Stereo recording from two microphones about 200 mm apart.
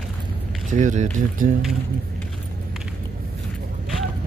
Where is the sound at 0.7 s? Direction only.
40° right (ahead or behind).